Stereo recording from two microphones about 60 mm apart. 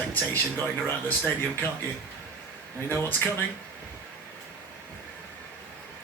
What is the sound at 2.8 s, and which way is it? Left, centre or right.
Speech, left.